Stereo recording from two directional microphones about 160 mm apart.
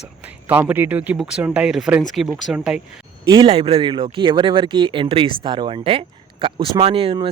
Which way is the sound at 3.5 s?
40° right (ahead or behind).